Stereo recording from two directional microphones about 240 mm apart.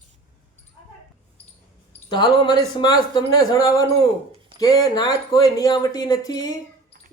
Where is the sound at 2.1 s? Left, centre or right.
Centre.